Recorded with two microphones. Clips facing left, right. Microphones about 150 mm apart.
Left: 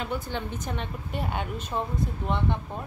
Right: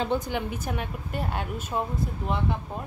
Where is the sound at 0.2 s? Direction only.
10° right (ahead or behind).